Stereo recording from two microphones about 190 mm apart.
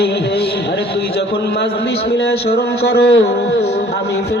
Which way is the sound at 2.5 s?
55° left (ahead or behind).